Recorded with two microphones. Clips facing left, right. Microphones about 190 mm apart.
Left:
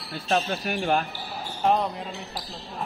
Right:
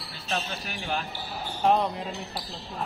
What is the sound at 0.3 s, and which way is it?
Speech, 55° left (ahead or behind).